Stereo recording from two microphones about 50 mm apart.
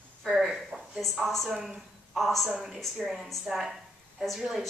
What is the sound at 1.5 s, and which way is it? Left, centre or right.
Speech, centre.